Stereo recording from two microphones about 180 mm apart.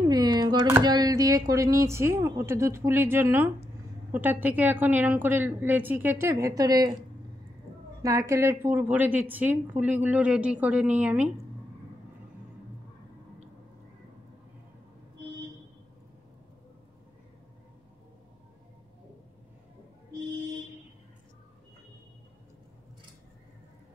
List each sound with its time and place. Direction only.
0.1 s speech: 20° right (ahead or behind)